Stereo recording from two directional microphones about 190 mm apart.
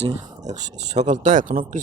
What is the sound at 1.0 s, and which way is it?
Speech, 40° right (ahead or behind).